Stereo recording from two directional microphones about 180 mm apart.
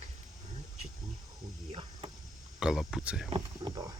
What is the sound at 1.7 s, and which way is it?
Cricket, 25° right (ahead or behind).